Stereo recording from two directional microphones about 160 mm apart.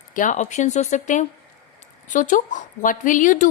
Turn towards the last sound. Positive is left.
turn(degrees=55)  # may be behind; listen again after turning